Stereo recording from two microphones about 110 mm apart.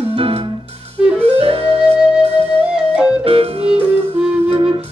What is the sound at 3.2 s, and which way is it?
Music, 60° right (ahead or behind).